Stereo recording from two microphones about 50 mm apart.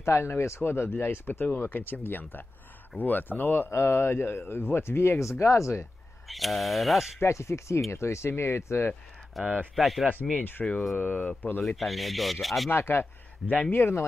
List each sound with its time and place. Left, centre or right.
0.0 s speech: left
3.7 s speech: left
6.2 s speech: centre
7.2 s speech: left
9.3 s speech: centre
10.6 s speech: centre
11.0 s speech: left
11.6 s speech: centre
12.6 s speech: left